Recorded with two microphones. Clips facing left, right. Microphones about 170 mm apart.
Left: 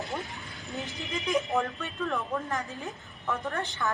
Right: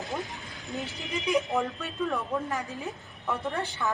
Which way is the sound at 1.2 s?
Centre (ahead or behind).